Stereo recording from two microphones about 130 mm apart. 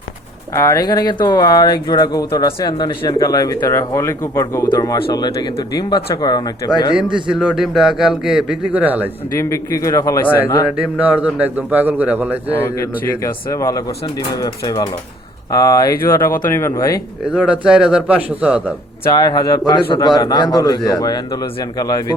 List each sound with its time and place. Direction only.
0.5 s speech: 30° left (ahead or behind)
6.9 s a man's voice: 5° right (ahead or behind)
9.4 s speech: 25° left (ahead or behind)
10.7 s a man's voice: 10° right (ahead or behind)
12.5 s speech: 20° left (ahead or behind)
17.2 s a man's voice: 5° right (ahead or behind)
19.0 s speech: 30° left (ahead or behind)